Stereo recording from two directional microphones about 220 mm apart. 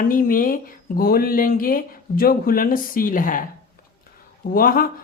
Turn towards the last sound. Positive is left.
turn(degrees=40)  # may be behind; listen again after turning